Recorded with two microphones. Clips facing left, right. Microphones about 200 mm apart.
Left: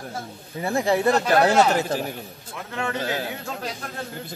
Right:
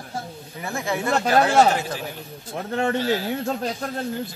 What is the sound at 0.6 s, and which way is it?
Speech, 35° left (ahead or behind).